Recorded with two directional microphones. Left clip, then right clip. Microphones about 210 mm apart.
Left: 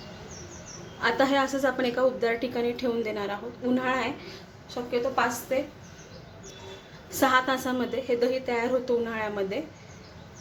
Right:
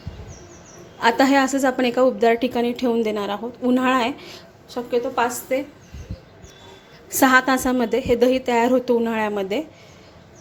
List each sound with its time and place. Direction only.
1.0 s a woman's voice: 35° right (ahead or behind)
7.2 s a woman's voice: 40° right (ahead or behind)